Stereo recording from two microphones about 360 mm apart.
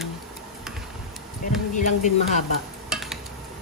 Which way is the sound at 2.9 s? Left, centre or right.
Centre.